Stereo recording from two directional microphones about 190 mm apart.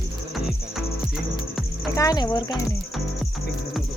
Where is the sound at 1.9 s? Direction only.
20° left (ahead or behind).